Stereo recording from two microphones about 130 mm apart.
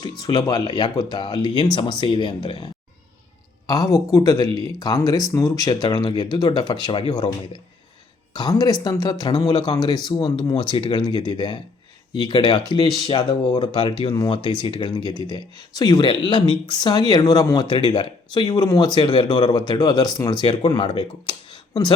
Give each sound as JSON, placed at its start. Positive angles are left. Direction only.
{"t": 0.0, "sound": "speech", "side_deg": 30}
{"t": 3.7, "sound": "speech", "side_deg": 25}